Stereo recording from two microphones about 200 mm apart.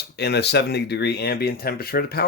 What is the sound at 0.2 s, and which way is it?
Speech, 55° left (ahead or behind).